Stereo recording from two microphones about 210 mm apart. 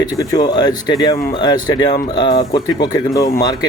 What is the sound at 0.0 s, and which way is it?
Speech, 20° left (ahead or behind).